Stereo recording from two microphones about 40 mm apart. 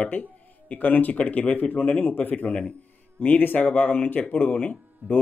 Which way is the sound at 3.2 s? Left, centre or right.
Left.